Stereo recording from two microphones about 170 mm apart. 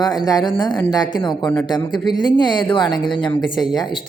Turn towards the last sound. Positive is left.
turn(degrees=25)  # may be behind; listen again after turning